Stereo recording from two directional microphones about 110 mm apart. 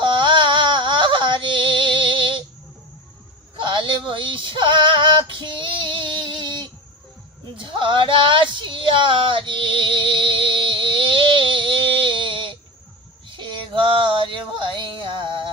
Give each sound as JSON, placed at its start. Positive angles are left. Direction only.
{"t": 0.0, "sound": "music", "side_deg": -45}
{"t": 3.6, "sound": "female singing", "side_deg": -45}
{"t": 7.5, "sound": "a sound", "side_deg": -50}
{"t": 13.2, "sound": "female singing", "side_deg": -45}